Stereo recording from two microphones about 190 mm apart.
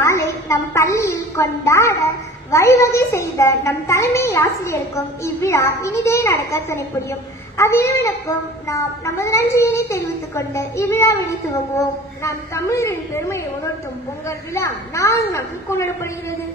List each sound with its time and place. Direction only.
0.0 s a woman's voice: 15° left (ahead or behind)